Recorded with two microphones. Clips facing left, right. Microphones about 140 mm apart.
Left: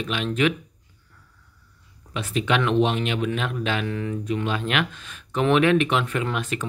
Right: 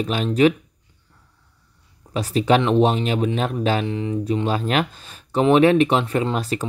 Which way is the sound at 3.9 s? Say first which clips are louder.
Right 3 dB; 20° right (ahead or behind).